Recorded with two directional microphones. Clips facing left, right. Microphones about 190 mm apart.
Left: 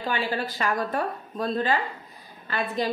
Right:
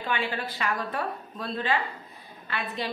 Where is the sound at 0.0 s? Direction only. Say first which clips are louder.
Left 3 dB; 40° left (ahead or behind).